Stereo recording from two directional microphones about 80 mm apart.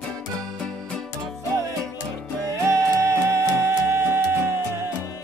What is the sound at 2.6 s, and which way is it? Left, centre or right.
Music, right.